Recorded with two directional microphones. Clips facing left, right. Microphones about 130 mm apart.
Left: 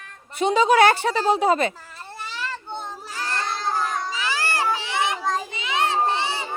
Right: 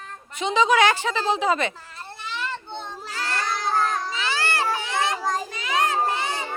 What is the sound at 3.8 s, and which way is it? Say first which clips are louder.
Cat: right 1 dB; 10° left (ahead or behind).